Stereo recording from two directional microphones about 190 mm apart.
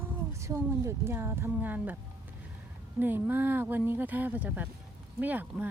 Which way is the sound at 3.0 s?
10° right (ahead or behind).